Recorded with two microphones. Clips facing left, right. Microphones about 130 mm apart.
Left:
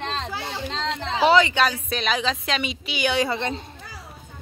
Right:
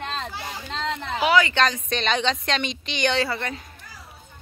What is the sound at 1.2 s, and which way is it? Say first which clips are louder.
Speech: left 2 dB; 25° left (ahead or behind).